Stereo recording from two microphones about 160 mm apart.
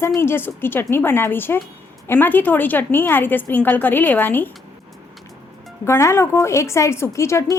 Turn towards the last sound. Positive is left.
turn(degrees=15)  # may be behind; listen again after turning